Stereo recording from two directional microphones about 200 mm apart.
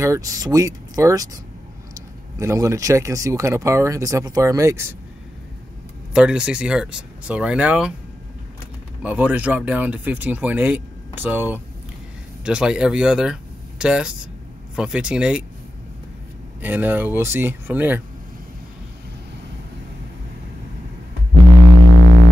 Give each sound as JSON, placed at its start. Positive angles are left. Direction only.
{"t": 0.0, "sound": "speech", "side_deg": -15}
{"t": 6.1, "sound": "speech", "side_deg": -5}
{"t": 9.0, "sound": "speech", "side_deg": -5}
{"t": 16.6, "sound": "speech", "side_deg": -10}